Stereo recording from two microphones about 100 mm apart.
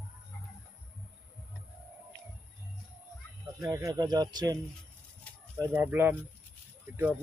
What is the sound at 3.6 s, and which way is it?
Speech, 35° right (ahead or behind).